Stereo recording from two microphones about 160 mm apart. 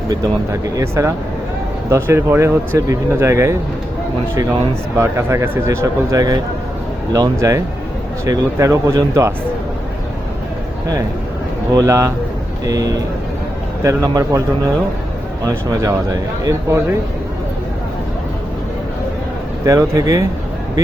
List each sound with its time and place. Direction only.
0.8 s speech: 20° right (ahead or behind)
4.9 s speech: 15° right (ahead or behind)
11.7 s speech: 20° right (ahead or behind)
19.6 s speech: 20° right (ahead or behind)